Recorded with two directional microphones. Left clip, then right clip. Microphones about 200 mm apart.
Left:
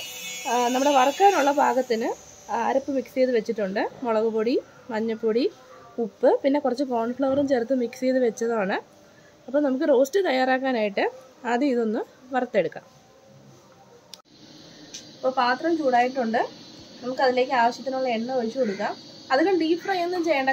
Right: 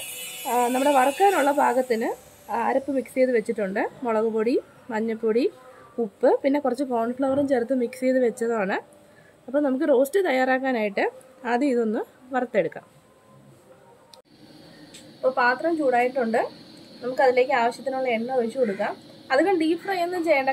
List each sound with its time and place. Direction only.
0.4 s speech: centre (ahead or behind)
15.3 s a woman's voice: 15° right (ahead or behind)